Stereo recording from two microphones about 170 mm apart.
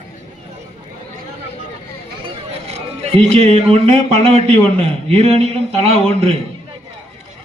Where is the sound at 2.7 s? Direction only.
40° right (ahead or behind).